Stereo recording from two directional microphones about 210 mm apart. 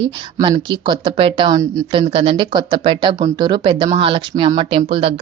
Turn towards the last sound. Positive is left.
turn(degrees=-25)  # may be behind; listen again after turning